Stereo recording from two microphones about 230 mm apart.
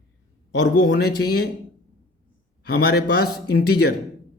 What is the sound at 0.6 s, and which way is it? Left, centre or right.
Speech, left.